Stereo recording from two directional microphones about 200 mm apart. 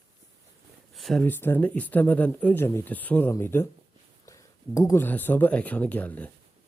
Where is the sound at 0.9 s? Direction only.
Centre (ahead or behind).